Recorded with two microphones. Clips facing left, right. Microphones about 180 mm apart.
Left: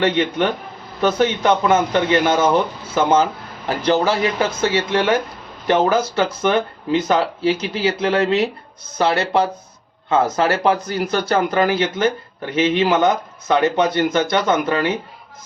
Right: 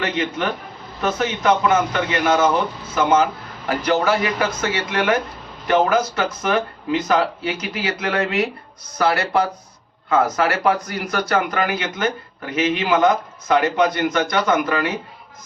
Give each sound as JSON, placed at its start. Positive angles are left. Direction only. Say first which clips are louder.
{"t": 0.0, "sound": "speech", "louder": "left 5 dB", "side_deg": 30}